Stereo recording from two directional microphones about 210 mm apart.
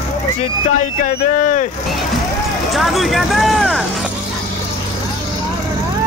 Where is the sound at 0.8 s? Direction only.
35° left (ahead or behind).